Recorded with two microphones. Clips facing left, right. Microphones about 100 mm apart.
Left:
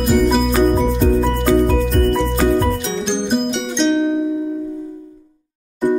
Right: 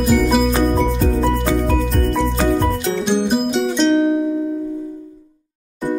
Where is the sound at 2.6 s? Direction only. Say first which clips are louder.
Even; centre (ahead or behind).